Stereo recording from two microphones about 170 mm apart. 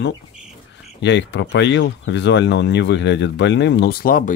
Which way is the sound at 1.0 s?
90° left.